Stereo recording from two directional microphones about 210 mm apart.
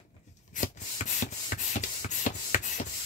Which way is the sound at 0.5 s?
35° left (ahead or behind).